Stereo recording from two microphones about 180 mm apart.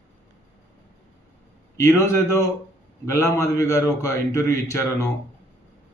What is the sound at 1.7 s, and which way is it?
Speech, 15° left (ahead or behind).